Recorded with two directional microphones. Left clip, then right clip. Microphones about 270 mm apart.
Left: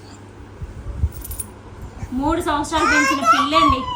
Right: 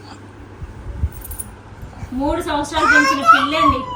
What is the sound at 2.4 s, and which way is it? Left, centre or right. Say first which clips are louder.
A child's voice: right 1 dB; centre.